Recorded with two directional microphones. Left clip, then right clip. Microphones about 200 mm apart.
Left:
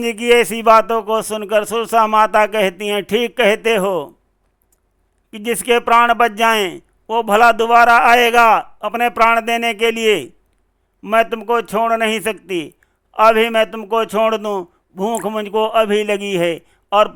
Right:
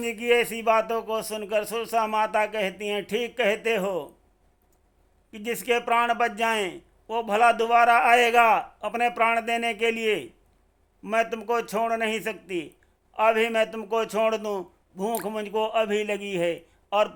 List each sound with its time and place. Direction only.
0.0 s a man's voice: 25° left (ahead or behind)
5.3 s a man's voice: 25° left (ahead or behind)